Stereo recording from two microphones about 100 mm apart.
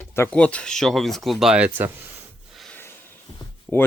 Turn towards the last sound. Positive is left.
turn(degrees=0)  # may be behind; listen again after turning